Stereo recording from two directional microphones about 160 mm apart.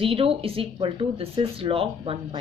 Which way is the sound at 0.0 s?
35° right (ahead or behind).